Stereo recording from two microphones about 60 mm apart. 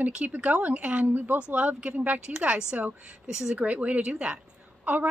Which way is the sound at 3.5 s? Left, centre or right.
Right.